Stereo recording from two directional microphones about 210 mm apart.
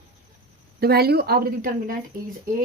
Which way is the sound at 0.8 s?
50° right (ahead or behind).